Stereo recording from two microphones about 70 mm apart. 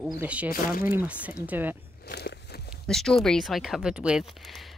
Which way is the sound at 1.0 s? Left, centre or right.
Centre.